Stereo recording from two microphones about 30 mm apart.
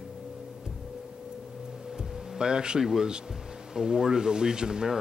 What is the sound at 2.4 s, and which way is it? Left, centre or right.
Speech, right.